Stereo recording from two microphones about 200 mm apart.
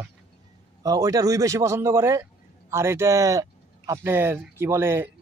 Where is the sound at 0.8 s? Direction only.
15° right (ahead or behind).